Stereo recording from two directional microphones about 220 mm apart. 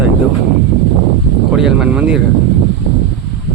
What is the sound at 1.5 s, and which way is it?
Speech, 5° right (ahead or behind).